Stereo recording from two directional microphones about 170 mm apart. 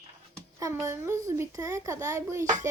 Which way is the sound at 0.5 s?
15° right (ahead or behind).